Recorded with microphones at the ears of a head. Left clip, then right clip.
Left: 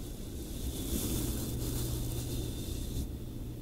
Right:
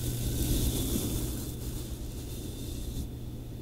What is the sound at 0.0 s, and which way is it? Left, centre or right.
Vehicle, right.